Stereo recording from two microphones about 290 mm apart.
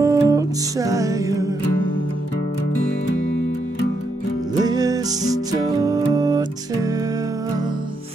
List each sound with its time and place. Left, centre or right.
0.0 s music: centre
4.6 s music: centre